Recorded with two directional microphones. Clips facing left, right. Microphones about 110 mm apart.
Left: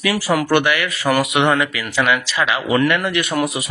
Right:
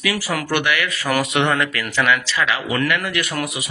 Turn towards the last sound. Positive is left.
turn(degrees=20)  # may be behind; listen again after turning